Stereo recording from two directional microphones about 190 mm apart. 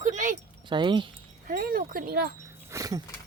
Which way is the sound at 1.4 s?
50° right (ahead or behind).